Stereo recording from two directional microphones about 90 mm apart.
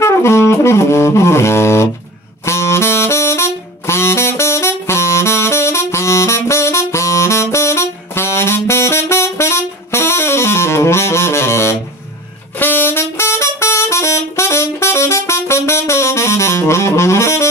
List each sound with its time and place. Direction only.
0.0 s music: 30° left (ahead or behind)
2.4 s saxophone: 30° left (ahead or behind)
12.5 s vehicle horn: 20° left (ahead or behind)